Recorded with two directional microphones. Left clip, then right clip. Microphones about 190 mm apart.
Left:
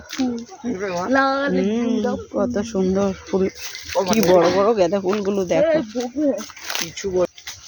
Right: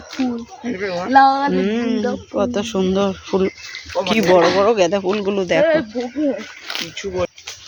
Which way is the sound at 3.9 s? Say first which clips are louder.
Right 1 dB; 40° left (ahead or behind).